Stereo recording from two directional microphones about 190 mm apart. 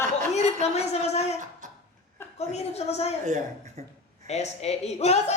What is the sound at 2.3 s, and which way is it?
Speech, 35° left (ahead or behind).